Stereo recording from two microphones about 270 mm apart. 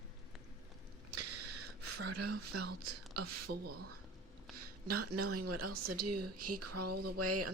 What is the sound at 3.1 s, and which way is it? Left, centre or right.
Speech, right.